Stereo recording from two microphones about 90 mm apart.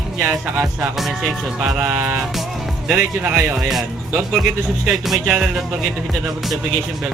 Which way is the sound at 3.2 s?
25° right (ahead or behind).